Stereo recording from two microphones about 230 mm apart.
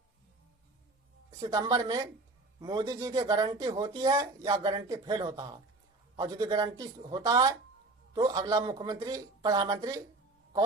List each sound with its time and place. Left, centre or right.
1.3 s speech: centre